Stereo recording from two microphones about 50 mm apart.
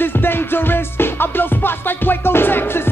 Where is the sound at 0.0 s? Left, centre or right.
Left.